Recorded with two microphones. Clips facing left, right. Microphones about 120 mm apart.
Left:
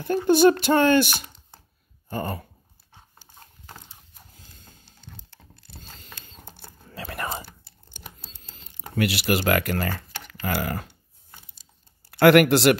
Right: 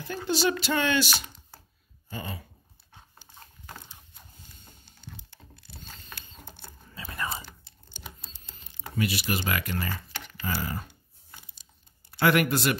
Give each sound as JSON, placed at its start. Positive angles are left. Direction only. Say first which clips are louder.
{"t": 0.3, "sound": "speech", "louder": "left 9 dB", "side_deg": 55}
{"t": 2.0, "sound": "a sound", "louder": "left 8 dB", "side_deg": 50}
{"t": 6.9, "sound": "whispering", "louder": "left 3 dB", "side_deg": 60}
{"t": 8.5, "sound": "speech", "louder": "left 4 dB", "side_deg": 70}
{"t": 12.1, "sound": "speech", "louder": "left 8 dB", "side_deg": 70}